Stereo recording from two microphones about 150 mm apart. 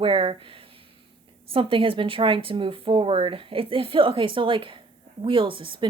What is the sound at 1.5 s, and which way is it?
A woman's voice, 35° right (ahead or behind).